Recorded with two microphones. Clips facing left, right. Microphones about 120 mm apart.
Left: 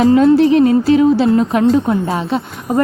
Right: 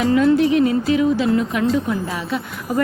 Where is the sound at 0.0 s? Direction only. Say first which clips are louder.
Left 6 dB; 30° left (ahead or behind).